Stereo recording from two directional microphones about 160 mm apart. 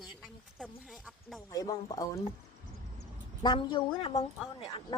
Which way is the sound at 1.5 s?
25° left (ahead or behind).